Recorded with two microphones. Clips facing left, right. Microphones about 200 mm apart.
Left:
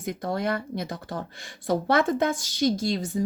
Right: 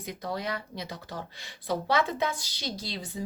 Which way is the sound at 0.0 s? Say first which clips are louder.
Left 6 dB; 50° left (ahead or behind).